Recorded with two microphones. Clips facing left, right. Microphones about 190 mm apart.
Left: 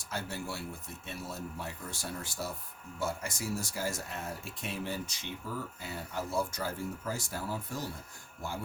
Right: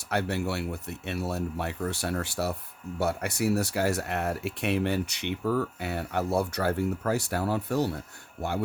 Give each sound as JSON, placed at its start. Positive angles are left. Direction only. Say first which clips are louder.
{"t": 0.1, "sound": "speech", "louder": "right 10 dB", "side_deg": -65}